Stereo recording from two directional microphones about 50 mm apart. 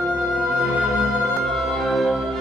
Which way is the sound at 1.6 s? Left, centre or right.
Centre.